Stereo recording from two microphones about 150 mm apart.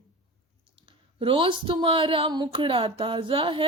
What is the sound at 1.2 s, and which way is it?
Speech, 35° right (ahead or behind).